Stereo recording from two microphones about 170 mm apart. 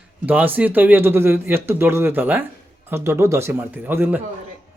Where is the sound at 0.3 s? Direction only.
10° right (ahead or behind).